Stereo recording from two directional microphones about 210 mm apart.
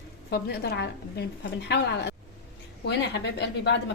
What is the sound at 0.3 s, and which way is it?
A woman's voice, 50° left (ahead or behind).